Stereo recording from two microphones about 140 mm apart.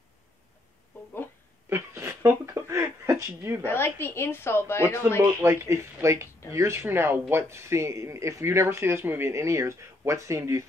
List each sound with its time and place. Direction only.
1.7 s a sound: 20° right (ahead or behind)
3.6 s a woman's voice: 15° left (ahead or behind)
5.4 s speech: 20° right (ahead or behind)